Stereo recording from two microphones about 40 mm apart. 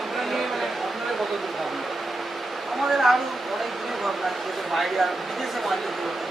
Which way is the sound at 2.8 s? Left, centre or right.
Centre.